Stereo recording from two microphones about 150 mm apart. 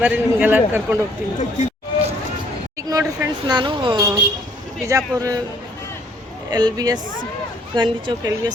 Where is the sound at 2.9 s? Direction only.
25° right (ahead or behind).